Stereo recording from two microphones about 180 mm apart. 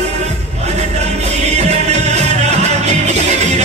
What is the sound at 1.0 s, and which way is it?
Music, 40° right (ahead or behind).